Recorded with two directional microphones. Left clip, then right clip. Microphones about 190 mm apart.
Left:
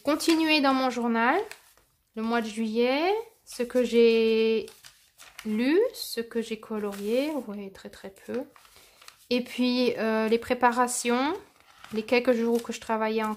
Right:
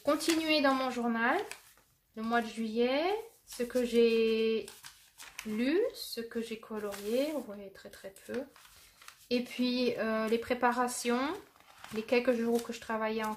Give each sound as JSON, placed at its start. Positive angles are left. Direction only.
{"t": 0.0, "sound": "speech", "side_deg": 45}